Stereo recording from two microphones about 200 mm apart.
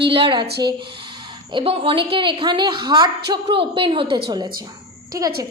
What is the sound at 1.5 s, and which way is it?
A woman's voice, 25° right (ahead or behind).